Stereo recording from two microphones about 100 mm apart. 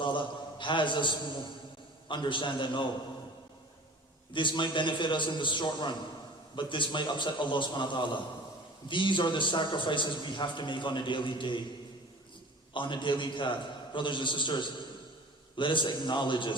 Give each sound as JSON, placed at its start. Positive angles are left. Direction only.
{"t": 0.0, "sound": "a sound", "side_deg": 55}
{"t": 2.0, "sound": "a man's voice", "side_deg": 55}
{"t": 4.3, "sound": "a man's voice", "side_deg": 55}
{"t": 12.7, "sound": "a man's voice", "side_deg": 55}